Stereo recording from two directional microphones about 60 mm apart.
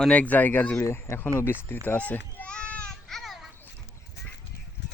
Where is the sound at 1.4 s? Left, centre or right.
Left.